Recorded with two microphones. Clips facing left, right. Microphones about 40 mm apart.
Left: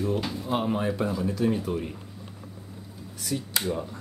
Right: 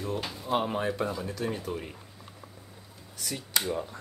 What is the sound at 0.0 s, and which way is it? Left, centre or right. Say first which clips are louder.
Speech: left 5 dB; centre.